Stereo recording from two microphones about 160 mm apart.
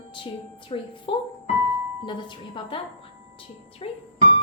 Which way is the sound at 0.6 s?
35° left (ahead or behind).